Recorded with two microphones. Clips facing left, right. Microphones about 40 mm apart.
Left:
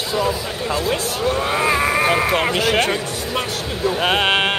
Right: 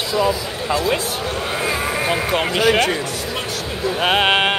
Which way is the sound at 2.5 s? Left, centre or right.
Centre.